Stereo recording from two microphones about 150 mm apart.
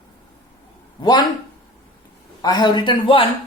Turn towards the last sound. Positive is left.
turn(degrees=35)  # may be behind; listen again after turning